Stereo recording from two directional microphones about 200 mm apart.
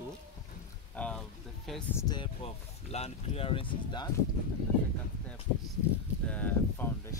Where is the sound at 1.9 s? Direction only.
20° left (ahead or behind).